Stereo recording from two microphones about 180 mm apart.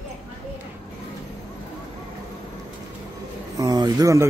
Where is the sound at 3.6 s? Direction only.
20° right (ahead or behind).